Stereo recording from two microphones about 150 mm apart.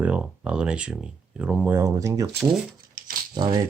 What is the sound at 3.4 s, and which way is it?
Speech, 30° right (ahead or behind).